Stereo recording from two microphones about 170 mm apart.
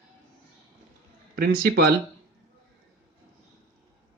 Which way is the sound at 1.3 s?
65° right (ahead or behind).